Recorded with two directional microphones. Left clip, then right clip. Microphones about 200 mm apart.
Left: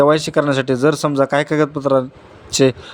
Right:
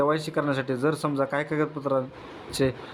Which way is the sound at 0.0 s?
30° left (ahead or behind).